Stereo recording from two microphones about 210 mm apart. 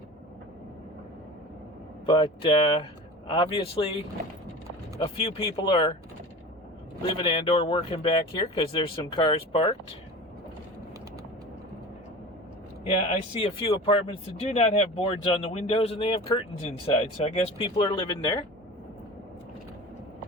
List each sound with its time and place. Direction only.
2.0 s speech: 25° left (ahead or behind)
4.9 s speech: 25° left (ahead or behind)
7.2 s speech: 20° left (ahead or behind)
13.4 s speech: 25° left (ahead or behind)